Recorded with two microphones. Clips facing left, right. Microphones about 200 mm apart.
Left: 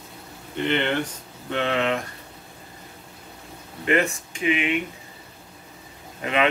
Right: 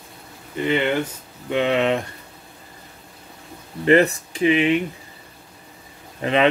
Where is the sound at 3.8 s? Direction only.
35° right (ahead or behind).